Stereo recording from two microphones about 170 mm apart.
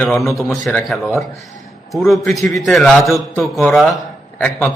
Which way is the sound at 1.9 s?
Centre (ahead or behind).